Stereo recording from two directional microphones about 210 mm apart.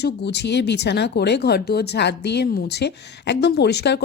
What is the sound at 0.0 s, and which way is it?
Speech, 55° left (ahead or behind).